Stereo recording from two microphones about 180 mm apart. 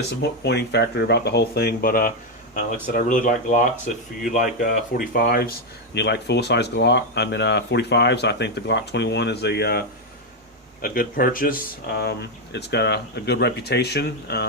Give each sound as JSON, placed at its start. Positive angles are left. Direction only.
{"t": 0.2, "sound": "speech", "side_deg": 70}
{"t": 5.9, "sound": "speech", "side_deg": 70}